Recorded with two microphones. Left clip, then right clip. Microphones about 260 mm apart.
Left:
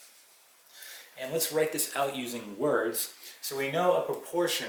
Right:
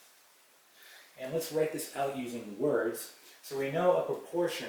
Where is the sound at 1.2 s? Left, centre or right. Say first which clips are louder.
Left 3 dB; centre.